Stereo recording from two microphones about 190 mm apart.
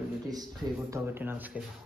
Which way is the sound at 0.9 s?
10° right (ahead or behind).